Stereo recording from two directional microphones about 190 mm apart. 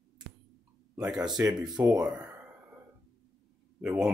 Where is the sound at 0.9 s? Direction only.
15° right (ahead or behind).